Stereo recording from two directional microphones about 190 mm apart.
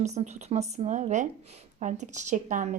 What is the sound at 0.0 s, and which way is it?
A woman's voice, 35° right (ahead or behind).